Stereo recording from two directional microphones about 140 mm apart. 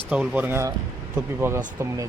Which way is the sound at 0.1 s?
10° right (ahead or behind).